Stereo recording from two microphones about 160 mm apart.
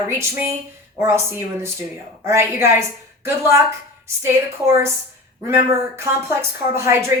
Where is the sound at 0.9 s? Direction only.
15° right (ahead or behind).